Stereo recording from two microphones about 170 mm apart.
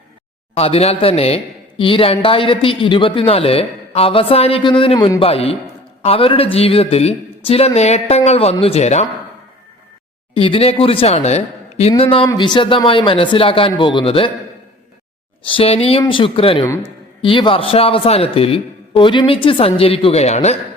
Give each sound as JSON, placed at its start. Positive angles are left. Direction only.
{"t": 0.5, "sound": "speech", "side_deg": 35}
{"t": 10.3, "sound": "speech", "side_deg": 35}
{"t": 15.4, "sound": "speech", "side_deg": 35}